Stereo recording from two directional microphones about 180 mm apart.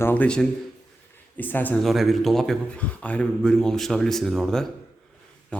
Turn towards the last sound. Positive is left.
turn(degrees=0)  # may be behind; listen again after turning